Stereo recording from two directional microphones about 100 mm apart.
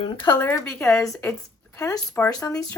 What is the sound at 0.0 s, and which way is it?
Speech, 50° left (ahead or behind).